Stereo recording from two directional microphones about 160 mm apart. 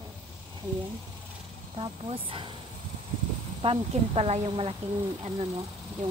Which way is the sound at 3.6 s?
35° right (ahead or behind).